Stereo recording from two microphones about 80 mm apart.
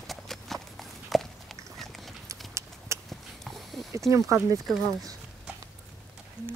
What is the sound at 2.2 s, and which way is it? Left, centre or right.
Clip-clop, right.